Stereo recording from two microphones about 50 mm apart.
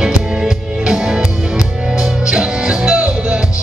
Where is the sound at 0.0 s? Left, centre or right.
Centre.